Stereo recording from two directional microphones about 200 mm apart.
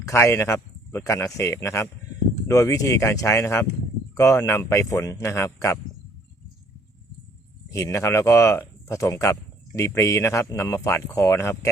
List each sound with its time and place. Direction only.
0.1 s a man's voice: 15° left (ahead or behind)
7.7 s a man's voice: 15° left (ahead or behind)